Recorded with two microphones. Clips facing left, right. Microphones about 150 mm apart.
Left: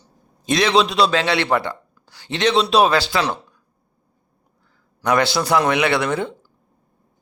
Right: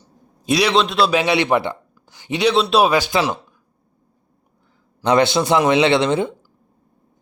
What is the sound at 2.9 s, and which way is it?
Speech, 15° right (ahead or behind).